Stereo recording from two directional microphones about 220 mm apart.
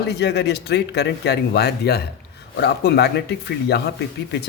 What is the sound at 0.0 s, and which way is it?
Speech, 50° left (ahead or behind).